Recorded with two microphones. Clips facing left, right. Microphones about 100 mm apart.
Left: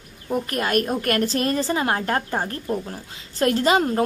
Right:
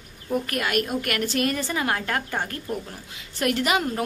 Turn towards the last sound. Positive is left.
turn(degrees=30)  # may be behind; listen again after turning